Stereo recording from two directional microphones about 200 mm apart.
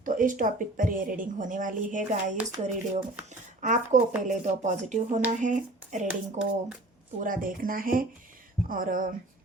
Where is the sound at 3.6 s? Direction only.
40° right (ahead or behind).